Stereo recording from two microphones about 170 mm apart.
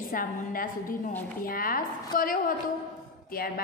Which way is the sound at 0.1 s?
55° left (ahead or behind).